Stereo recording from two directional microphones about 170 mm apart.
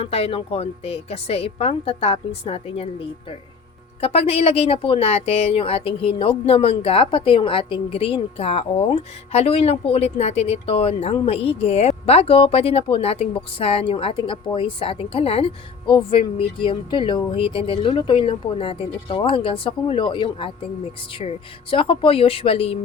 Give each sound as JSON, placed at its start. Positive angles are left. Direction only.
{"t": 0.0, "sound": "speech", "side_deg": 35}
{"t": 4.0, "sound": "speech", "side_deg": 35}